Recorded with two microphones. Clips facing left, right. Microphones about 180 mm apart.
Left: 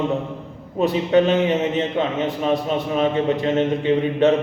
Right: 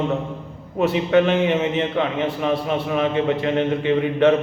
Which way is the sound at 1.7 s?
20° left (ahead or behind).